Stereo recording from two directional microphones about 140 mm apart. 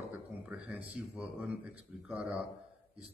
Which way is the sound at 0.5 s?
10° right (ahead or behind).